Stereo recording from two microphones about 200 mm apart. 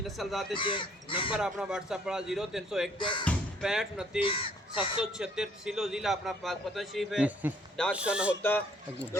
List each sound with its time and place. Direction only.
0.2 s a man's voice: centre (ahead or behind)
0.5 s speech: 25° left (ahead or behind)
1.3 s a man's voice: 5° right (ahead or behind)
3.0 s speech: 25° left (ahead or behind)
3.2 s speech: centre (ahead or behind)
4.2 s speech: 25° left (ahead or behind)
5.1 s a man's voice: 5° right (ahead or behind)
8.4 s a man's voice: 10° left (ahead or behind)